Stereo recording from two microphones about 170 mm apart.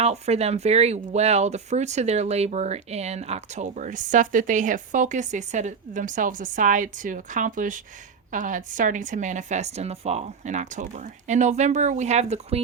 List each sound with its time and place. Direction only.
0.0 s speech: 40° right (ahead or behind)